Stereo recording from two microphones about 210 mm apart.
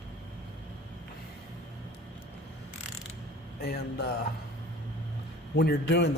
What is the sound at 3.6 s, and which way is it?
Speech, 50° left (ahead or behind).